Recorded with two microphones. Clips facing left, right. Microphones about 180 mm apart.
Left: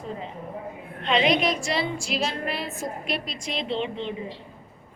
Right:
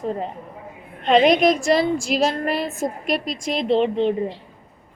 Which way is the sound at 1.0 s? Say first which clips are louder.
Right 7 dB; 45° right (ahead or behind).